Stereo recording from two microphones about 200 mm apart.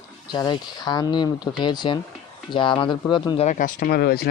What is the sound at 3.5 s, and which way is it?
Speech, 40° left (ahead or behind).